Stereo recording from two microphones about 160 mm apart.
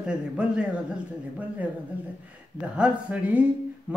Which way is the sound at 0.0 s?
5° right (ahead or behind).